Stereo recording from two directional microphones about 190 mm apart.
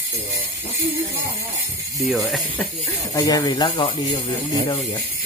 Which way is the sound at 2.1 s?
Centre (ahead or behind).